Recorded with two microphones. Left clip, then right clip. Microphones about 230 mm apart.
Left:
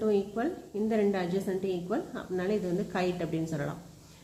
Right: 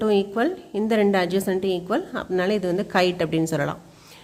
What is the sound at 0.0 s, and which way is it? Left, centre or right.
A woman's voice, right.